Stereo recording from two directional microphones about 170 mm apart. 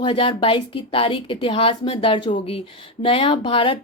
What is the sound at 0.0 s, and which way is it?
A woman's voice, 30° left (ahead or behind).